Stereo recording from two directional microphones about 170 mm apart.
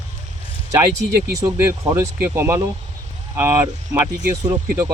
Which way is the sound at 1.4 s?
20° right (ahead or behind).